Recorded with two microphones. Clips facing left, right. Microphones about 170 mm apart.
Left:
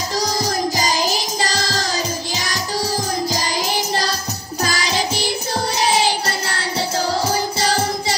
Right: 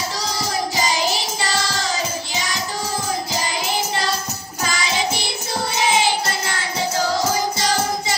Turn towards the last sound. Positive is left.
turn(degrees=35)  # may be behind; listen again after turning